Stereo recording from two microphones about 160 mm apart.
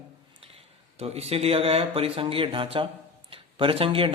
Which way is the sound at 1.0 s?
40° right (ahead or behind).